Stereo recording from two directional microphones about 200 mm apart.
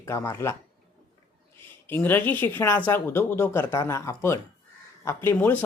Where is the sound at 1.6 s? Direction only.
10° left (ahead or behind).